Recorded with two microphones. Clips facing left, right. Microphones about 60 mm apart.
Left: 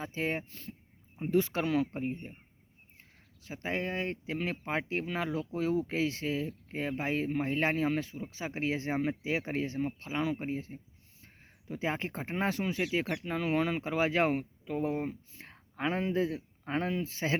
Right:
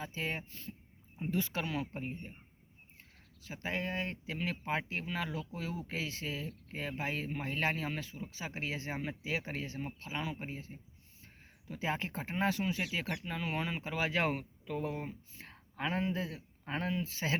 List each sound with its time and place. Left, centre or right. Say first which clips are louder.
0.0 s speech: left 5 dB; left
3.4 s speech: left 3 dB; left